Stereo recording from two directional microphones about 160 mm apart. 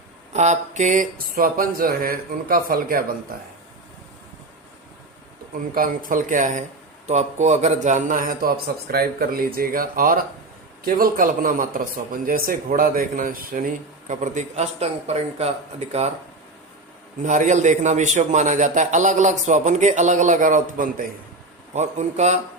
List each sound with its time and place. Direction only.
0.3 s a man's voice: 45° right (ahead or behind); by 3.2 s 65° right (ahead or behind)
5.7 s a man's voice: 60° right (ahead or behind)
14.1 s a man's voice: 50° right (ahead or behind)
17.2 s a man's voice: 50° right (ahead or behind)
21.7 s a man's voice: 45° right (ahead or behind)